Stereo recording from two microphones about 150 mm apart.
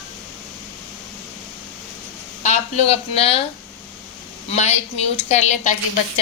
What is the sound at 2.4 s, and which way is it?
Speech, 45° left (ahead or behind).